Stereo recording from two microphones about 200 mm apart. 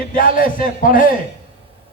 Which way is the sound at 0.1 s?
45° left (ahead or behind).